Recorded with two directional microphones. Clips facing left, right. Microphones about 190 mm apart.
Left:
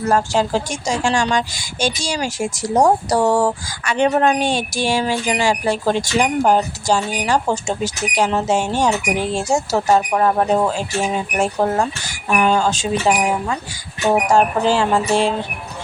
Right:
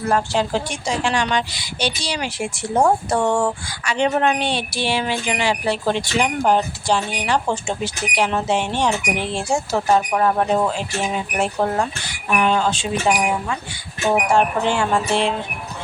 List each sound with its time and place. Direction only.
0.0 s speech: 45° left (ahead or behind)
3.8 s speech: 50° left (ahead or behind)
14.0 s music: 40° left (ahead or behind)